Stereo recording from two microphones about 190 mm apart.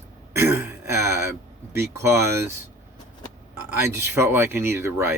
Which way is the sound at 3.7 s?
10° right (ahead or behind).